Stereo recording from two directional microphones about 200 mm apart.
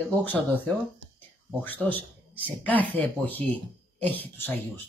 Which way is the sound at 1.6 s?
10° left (ahead or behind).